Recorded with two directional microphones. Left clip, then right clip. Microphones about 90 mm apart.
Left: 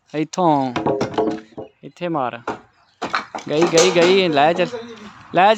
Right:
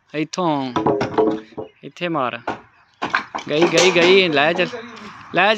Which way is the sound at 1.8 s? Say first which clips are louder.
Even; 25° left (ahead or behind).